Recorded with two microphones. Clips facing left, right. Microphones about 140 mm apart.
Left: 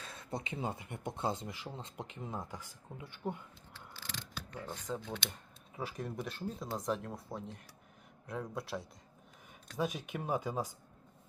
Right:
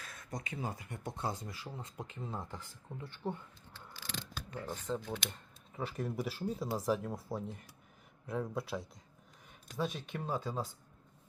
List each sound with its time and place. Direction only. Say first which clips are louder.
0.0 s speech: left 3 dB; 30° left (ahead or behind)
3.9 s mechanisms: right 2 dB; 10° right (ahead or behind)
4.9 s speech: right 2 dB; 5° right (ahead or behind)
5.3 s camera: even; 10° left (ahead or behind)
6.0 s speech: right 5 dB; 5° right (ahead or behind)
9.7 s speech: left 1 dB; 15° left (ahead or behind)